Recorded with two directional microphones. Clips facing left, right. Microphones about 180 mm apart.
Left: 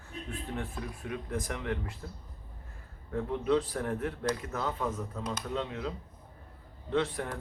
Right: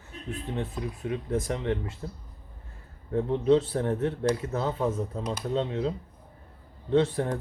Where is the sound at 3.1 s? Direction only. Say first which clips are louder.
Right 6 dB; 25° right (ahead or behind).